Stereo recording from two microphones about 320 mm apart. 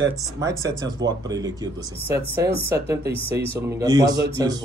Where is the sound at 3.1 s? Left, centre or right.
Centre.